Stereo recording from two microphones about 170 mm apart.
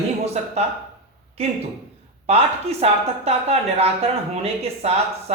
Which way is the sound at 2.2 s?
40° right (ahead or behind).